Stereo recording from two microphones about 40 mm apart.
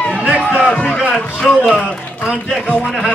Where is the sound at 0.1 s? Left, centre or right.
Right.